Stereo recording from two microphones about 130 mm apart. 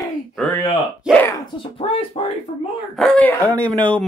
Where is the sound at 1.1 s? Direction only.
5° right (ahead or behind).